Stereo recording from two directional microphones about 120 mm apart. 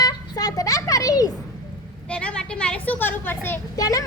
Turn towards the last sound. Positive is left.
turn(degrees=30)  # may be behind; listen again after turning